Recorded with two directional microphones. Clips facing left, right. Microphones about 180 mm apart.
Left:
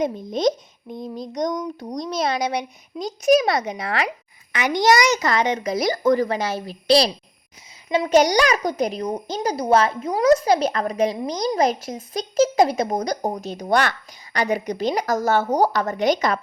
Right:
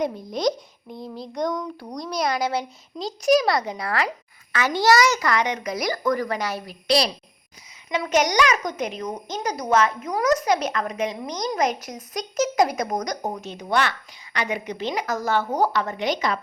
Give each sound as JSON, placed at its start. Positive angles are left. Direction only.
{"t": 0.0, "sound": "a child's voice", "side_deg": 20}